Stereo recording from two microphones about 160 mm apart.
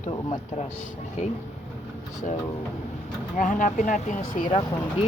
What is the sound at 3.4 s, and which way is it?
Speech, 55° left (ahead or behind).